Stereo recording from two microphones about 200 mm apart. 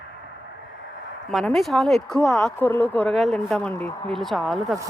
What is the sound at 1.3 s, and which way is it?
A woman's voice, centre (ahead or behind).